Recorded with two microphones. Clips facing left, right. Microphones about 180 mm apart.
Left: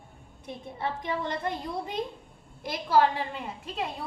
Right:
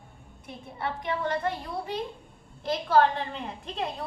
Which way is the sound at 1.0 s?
20° left (ahead or behind).